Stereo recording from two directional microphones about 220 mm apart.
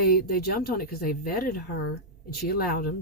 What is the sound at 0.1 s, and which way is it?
Speech, 40° left (ahead or behind).